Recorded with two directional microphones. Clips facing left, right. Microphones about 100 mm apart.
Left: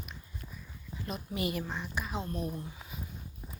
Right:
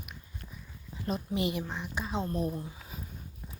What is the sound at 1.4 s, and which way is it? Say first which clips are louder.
Speech: left 2 dB; 20° right (ahead or behind).